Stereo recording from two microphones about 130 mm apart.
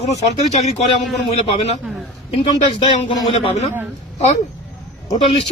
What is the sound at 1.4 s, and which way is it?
Speech, 55° left (ahead or behind).